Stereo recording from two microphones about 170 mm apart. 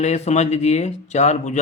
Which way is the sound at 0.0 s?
40° left (ahead or behind).